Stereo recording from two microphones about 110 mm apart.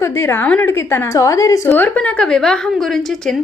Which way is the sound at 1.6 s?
15° left (ahead or behind).